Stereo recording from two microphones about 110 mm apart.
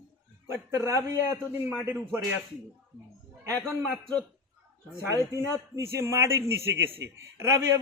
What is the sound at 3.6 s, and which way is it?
Speech, 20° right (ahead or behind).